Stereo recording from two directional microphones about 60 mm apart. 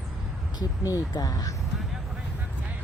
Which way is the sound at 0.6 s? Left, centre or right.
Left.